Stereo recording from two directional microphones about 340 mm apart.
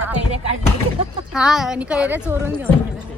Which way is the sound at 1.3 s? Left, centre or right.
Centre.